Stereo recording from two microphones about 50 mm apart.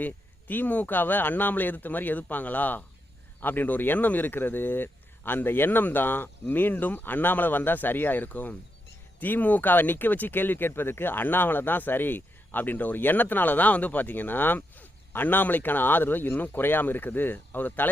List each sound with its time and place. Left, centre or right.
0.0 s speech: left